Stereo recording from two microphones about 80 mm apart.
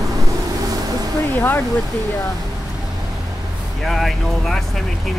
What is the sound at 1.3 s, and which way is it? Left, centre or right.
Speech, left.